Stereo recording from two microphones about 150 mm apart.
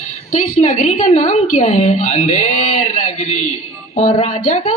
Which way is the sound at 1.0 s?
60° left (ahead or behind).